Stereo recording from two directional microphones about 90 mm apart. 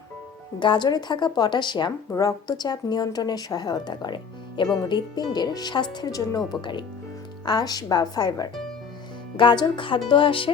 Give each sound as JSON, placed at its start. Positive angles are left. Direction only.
{"t": 0.6, "sound": "a woman's voice", "side_deg": 60}
{"t": 2.0, "sound": "a woman's voice", "side_deg": 40}
{"t": 9.4, "sound": "a woman's voice", "side_deg": 60}